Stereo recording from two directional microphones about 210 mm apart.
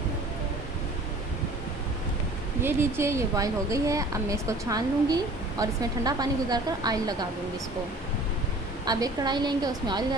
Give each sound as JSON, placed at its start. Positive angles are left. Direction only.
{"t": 2.6, "sound": "a woman's voice", "side_deg": -10}
{"t": 8.8, "sound": "a woman's voice", "side_deg": -20}